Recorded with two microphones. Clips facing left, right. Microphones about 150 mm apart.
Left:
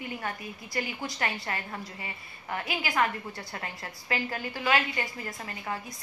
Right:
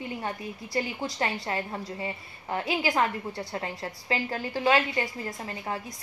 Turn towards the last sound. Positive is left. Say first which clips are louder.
# right 2 dB
turn(degrees=-30)  # may be behind; listen again after turning